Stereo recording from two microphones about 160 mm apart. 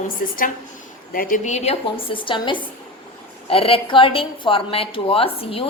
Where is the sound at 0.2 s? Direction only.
60° left (ahead or behind).